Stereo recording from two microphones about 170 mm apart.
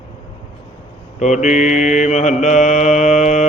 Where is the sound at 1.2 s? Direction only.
45° left (ahead or behind).